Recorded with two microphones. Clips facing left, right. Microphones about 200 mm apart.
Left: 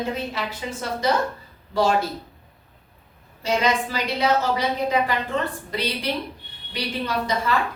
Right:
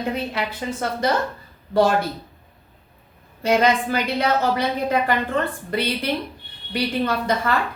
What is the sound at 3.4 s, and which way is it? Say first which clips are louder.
A woman's voice: right 4 dB; 55° right (ahead or behind).